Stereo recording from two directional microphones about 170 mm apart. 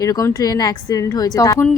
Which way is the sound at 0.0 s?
20° left (ahead or behind).